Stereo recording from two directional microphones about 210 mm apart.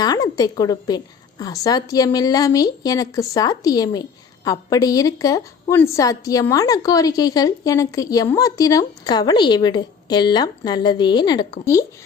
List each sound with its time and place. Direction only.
0.0 s a woman's voice: 15° left (ahead or behind)